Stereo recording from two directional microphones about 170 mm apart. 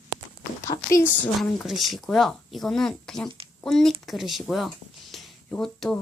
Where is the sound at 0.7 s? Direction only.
35° left (ahead or behind).